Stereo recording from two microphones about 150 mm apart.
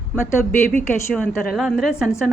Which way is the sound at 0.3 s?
15° left (ahead or behind).